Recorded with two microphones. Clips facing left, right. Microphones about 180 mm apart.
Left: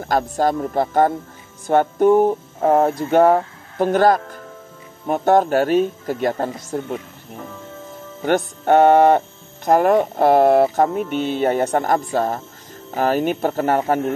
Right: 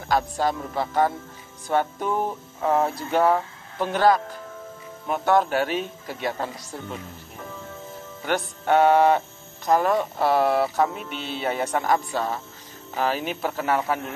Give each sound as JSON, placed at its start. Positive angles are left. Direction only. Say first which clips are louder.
{"t": 0.0, "sound": "speech", "louder": "left 4 dB", "side_deg": 45}
{"t": 8.2, "sound": "speech", "louder": "left 7 dB", "side_deg": 50}